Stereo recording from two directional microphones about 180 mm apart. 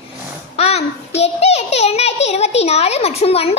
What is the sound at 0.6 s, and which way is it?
A child's voice, 35° left (ahead or behind).